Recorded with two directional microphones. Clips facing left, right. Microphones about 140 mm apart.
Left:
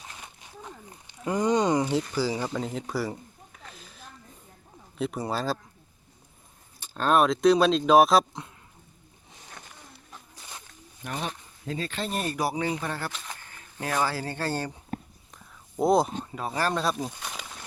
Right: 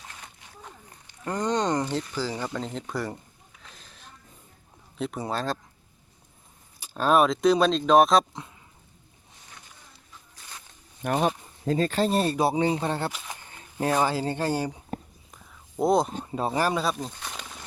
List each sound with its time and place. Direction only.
1.2 s speech: 10° left (ahead or behind)
3.7 s sniff: centre (ahead or behind)
4.9 s speech: centre (ahead or behind)
6.7 s speech: 10° right (ahead or behind)
11.0 s speech: 50° right (ahead or behind); by 13.1 s 25° right (ahead or behind)
13.1 s speech: 15° right (ahead or behind)
15.8 s speech: centre (ahead or behind)
16.3 s speech: 30° right (ahead or behind)
16.6 s speech: 10° right (ahead or behind)
16.8 s speech: centre (ahead or behind)
17.1 s a sound: 5° left (ahead or behind)